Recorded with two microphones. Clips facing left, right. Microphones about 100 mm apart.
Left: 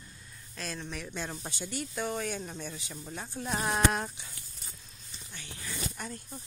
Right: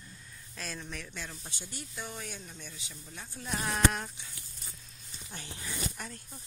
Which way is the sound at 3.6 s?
25° left (ahead or behind).